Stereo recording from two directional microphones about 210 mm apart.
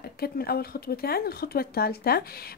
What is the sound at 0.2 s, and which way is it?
Speech, 45° left (ahead or behind).